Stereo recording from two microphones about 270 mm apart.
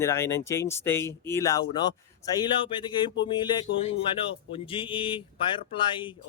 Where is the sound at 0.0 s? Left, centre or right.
Centre.